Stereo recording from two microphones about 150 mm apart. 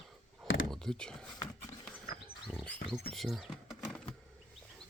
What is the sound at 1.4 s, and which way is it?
Horse, 25° left (ahead or behind).